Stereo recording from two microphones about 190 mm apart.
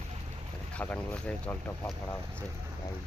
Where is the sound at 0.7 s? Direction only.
5° left (ahead or behind).